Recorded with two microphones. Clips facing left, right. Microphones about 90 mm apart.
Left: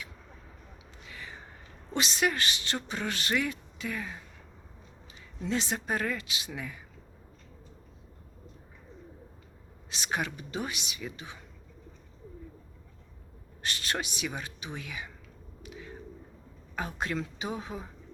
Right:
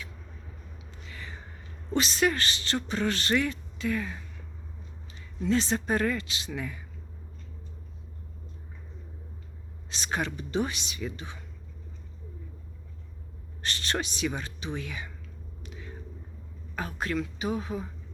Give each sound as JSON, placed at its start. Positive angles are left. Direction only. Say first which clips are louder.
{"t": 1.0, "sound": "a sound", "louder": "right 1 dB", "side_deg": 15}
{"t": 1.9, "sound": "a woman's voice", "louder": "right 3 dB", "side_deg": 20}
{"t": 5.4, "sound": "a woman's voice", "louder": "right 5 dB", "side_deg": 15}
{"t": 9.9, "sound": "a woman's voice", "louder": "right 2 dB", "side_deg": 15}
{"t": 13.6, "sound": "speech", "louder": "right 2 dB", "side_deg": 10}
{"t": 15.6, "sound": "a sound", "louder": "left 2 dB", "side_deg": 10}
{"t": 16.7, "sound": "a woman's voice", "louder": "right 2 dB", "side_deg": 20}